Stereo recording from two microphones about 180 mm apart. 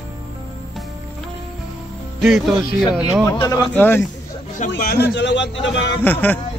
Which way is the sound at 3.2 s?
20° left (ahead or behind).